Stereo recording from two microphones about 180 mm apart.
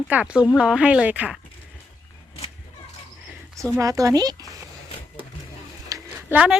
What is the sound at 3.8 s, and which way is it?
Speech, 20° right (ahead or behind).